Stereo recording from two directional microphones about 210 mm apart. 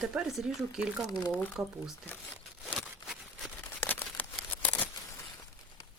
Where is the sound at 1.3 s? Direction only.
5° left (ahead or behind).